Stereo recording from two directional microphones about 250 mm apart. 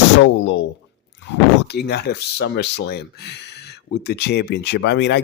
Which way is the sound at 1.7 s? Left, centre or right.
Left.